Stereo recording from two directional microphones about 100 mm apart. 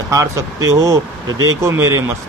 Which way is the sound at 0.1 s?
35° right (ahead or behind).